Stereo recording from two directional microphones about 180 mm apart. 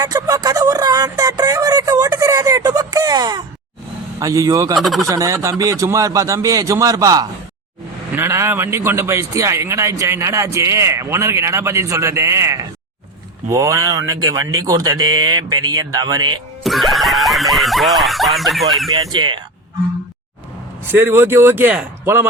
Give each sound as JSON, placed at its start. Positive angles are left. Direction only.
{"t": 0.0, "sound": "a sound", "side_deg": -20}
{"t": 4.2, "sound": "speech", "side_deg": -20}
{"t": 4.8, "sound": "snicker", "side_deg": 0}
{"t": 5.0, "sound": "a man's voice", "side_deg": -15}
{"t": 16.6, "sound": "snicker", "side_deg": 0}
{"t": 19.1, "sound": "speech", "side_deg": -25}
{"t": 20.8, "sound": "a man's voice", "side_deg": -10}